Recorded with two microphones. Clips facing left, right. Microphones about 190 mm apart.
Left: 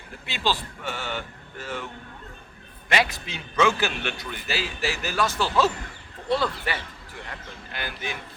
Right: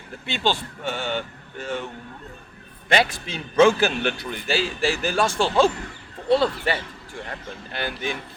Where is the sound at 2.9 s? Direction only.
30° right (ahead or behind).